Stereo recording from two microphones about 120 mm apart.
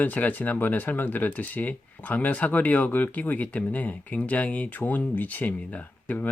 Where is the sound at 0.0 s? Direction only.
15° left (ahead or behind).